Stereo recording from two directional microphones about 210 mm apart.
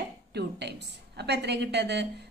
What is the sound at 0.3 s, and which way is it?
A woman's voice, 50° right (ahead or behind).